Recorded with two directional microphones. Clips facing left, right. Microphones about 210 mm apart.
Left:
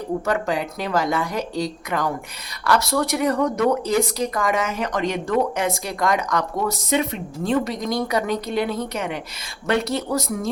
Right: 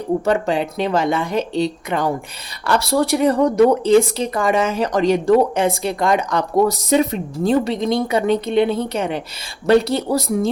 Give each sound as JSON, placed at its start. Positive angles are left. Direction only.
{"t": 0.3, "sound": "speech", "side_deg": -25}